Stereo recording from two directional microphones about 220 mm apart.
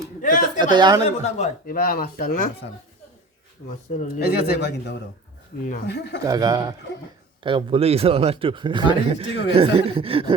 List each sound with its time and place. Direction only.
0.2 s speech: 35° left (ahead or behind)
0.6 s a man's voice: 20° right (ahead or behind)
1.2 s speech: 35° left (ahead or behind)
4.2 s a man's voice: 45° left (ahead or behind)
5.6 s speech: 35° left (ahead or behind)
6.0 s a man's voice: 50° left (ahead or behind)
6.2 s a man's voice: 15° right (ahead or behind)